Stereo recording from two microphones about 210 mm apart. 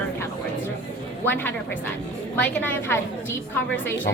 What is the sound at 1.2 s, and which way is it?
A woman's voice, 10° left (ahead or behind).